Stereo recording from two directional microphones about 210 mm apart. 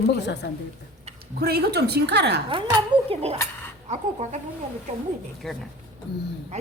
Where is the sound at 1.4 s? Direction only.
50° right (ahead or behind).